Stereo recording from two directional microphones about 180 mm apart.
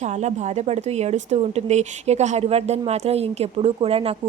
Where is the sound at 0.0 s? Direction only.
40° right (ahead or behind).